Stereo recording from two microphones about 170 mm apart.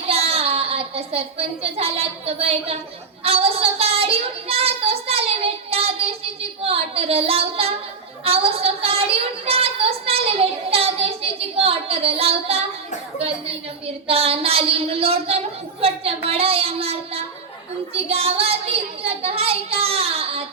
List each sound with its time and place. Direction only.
0.1 s speech: 35° right (ahead or behind)
3.2 s child singing: 35° right (ahead or behind)
8.2 s a sound: 35° right (ahead or behind)
13.1 s a woman's voice: 35° right (ahead or behind)